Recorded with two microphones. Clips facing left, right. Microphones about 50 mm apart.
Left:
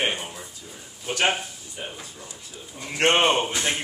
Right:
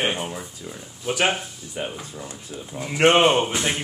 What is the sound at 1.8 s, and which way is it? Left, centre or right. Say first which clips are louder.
Speech: right 6 dB; right.